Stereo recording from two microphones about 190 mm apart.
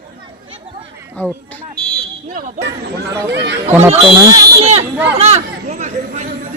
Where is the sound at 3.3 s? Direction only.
65° right (ahead or behind).